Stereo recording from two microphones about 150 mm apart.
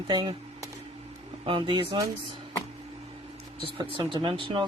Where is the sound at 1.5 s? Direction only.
35° right (ahead or behind).